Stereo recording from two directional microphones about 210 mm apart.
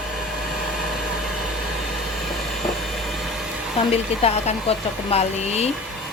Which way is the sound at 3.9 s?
30° left (ahead or behind).